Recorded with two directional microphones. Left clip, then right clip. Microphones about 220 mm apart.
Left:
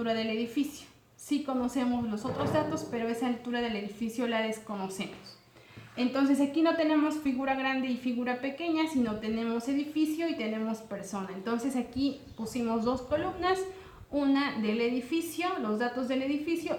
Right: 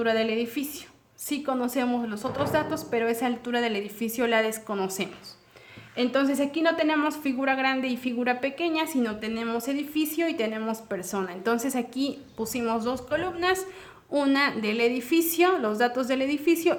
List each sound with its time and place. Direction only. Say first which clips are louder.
0.0 s a woman's voice: right 7 dB; 50° right (ahead or behind)
6.1 s a woman's voice: right 1 dB; 50° right (ahead or behind)